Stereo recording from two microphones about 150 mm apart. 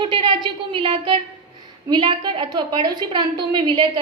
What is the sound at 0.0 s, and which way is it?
A woman's voice, 35° right (ahead or behind).